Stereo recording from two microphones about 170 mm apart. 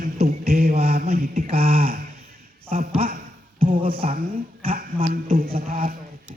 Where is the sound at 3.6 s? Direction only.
30° right (ahead or behind).